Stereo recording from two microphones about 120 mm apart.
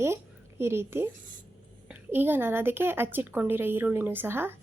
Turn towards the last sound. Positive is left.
turn(degrees=-20)  # may be behind; listen again after turning